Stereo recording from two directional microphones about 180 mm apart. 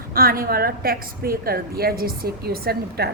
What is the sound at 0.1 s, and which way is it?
A woman's voice, 55° right (ahead or behind).